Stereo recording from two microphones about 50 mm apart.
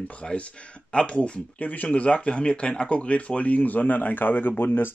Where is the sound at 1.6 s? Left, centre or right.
Left.